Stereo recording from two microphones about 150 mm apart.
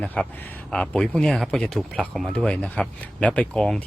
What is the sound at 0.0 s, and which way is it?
Speech, 10° left (ahead or behind).